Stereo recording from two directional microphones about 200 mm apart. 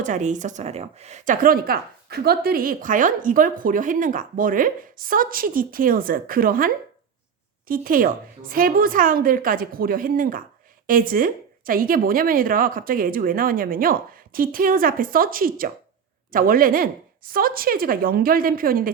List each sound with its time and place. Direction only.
0.0 s a woman's voice: 40° right (ahead or behind)
7.7 s a woman's voice: 45° right (ahead or behind)